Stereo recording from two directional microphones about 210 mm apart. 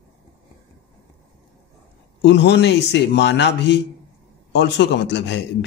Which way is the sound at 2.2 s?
55° left (ahead or behind).